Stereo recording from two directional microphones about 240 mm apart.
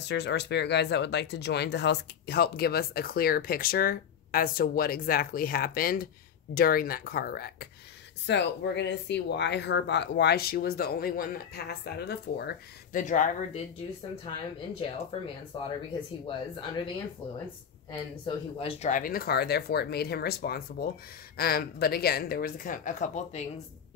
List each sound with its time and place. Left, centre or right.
0.0 s speech: left
15.5 s speech: left
18.2 s speech: left